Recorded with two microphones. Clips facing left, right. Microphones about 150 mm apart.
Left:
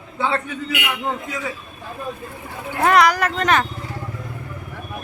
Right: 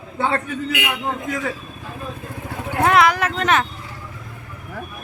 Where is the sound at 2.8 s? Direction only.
Centre (ahead or behind).